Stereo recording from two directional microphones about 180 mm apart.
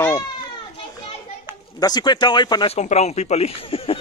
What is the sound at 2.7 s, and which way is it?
Speech, 35° left (ahead or behind).